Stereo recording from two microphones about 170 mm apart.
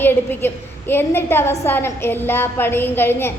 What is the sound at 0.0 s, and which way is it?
A woman's voice, 10° left (ahead or behind).